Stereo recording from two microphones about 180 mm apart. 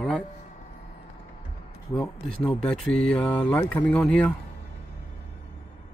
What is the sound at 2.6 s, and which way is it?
Speech, 5° left (ahead or behind).